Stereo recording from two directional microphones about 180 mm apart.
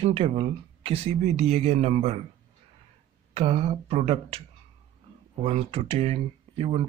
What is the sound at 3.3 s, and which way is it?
Speech, 35° right (ahead or behind).